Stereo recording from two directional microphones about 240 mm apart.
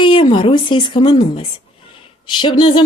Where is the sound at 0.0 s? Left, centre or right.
Centre.